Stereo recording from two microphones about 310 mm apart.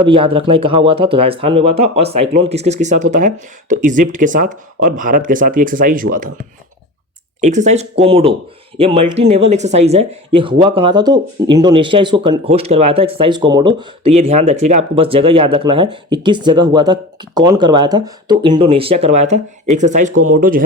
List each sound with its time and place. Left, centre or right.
0.0 s speech: centre
7.4 s speech: right